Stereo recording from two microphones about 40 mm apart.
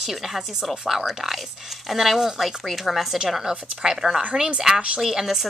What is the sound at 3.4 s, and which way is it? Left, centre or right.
Speech, centre.